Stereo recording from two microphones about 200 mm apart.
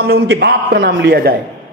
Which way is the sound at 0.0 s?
55° right (ahead or behind).